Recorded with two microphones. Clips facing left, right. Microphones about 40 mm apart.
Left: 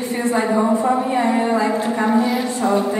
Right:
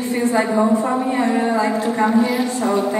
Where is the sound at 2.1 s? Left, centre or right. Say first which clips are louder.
Left 1 dB; centre.